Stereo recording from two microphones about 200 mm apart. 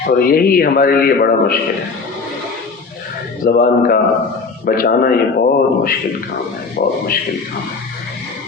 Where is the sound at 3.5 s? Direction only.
45° left (ahead or behind).